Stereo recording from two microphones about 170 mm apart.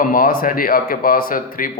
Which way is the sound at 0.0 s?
55° left (ahead or behind).